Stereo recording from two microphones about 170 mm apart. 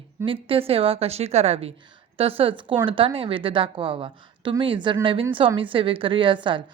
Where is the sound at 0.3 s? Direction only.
35° right (ahead or behind).